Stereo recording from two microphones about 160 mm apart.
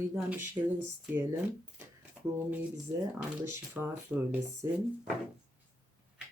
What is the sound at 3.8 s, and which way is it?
Speech, 5° right (ahead or behind).